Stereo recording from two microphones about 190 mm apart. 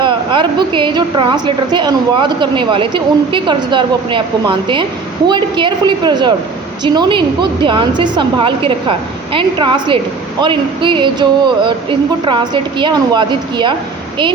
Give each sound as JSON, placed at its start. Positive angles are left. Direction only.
{"t": 0.0, "sound": "a woman's voice", "side_deg": -25}